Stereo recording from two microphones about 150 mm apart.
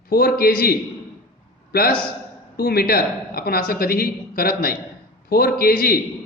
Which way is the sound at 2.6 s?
85° left.